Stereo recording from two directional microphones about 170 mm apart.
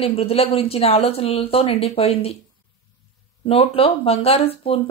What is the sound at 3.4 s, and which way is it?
A woman's voice, 35° left (ahead or behind).